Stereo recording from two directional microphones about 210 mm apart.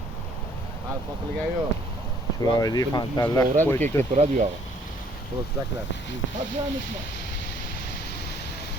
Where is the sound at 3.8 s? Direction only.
35° right (ahead or behind).